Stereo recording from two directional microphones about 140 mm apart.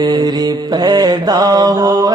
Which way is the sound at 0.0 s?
30° right (ahead or behind).